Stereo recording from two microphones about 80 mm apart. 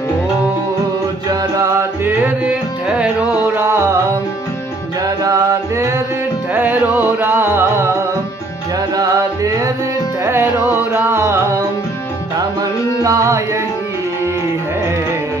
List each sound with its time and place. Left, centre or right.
1.8 s music: right
3.5 s music: right
5.2 s music: right
6.5 s music: right
8.9 s music: right
11.1 s music: right
13.0 s music: right